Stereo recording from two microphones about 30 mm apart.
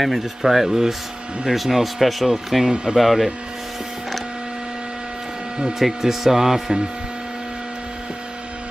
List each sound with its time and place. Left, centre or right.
0.0 s speech: centre
2.6 s speech: right
3.0 s speech: centre
5.8 s speech: centre